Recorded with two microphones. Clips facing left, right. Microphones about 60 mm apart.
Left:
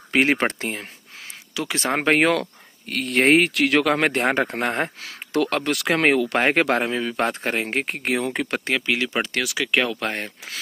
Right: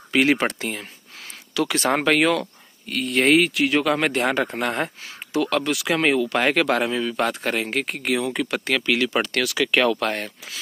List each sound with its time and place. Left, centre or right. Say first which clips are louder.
0.1 s speech: even; left
1.5 s speech: right 3 dB; left
2.1 s speech: left 1 dB; left
3.5 s speech: left 1 dB; left
3.9 s speech: left 1 dB; left
5.3 s speech: even; left
6.3 s speech: left 1 dB; left
8.7 s speech: right 2 dB; left
10.0 s speech: right 2 dB; left